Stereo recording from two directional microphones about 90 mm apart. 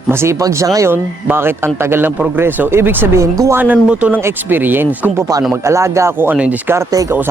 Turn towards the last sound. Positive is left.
turn(degrees=-35)  # may be behind; listen again after turning